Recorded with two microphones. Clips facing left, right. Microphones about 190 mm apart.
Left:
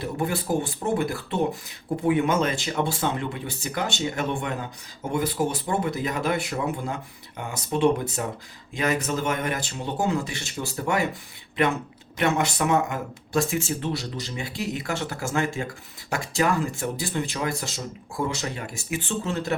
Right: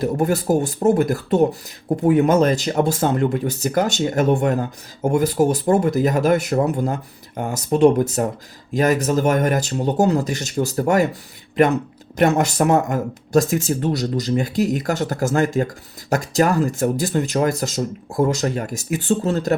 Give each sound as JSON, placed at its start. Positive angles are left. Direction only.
{"t": 0.0, "sound": "speech", "side_deg": -45}
{"t": 12.1, "sound": "speech", "side_deg": -40}